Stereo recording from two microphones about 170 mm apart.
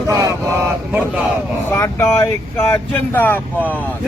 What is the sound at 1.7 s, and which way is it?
Speech, 15° left (ahead or behind).